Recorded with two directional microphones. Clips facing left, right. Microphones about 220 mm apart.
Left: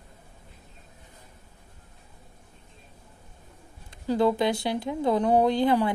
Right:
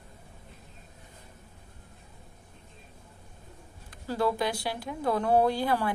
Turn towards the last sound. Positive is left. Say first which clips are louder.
# left 5 dB
turn(degrees=20)  # may be behind; listen again after turning